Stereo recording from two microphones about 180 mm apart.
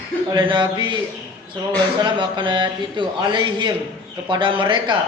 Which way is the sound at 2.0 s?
25° right (ahead or behind).